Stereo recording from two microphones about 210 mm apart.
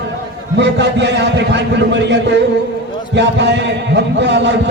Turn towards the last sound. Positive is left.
turn(degrees=-55)  # may be behind; listen again after turning